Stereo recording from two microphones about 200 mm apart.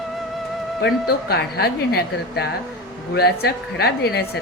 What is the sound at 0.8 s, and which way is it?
A woman's voice, 55° left (ahead or behind).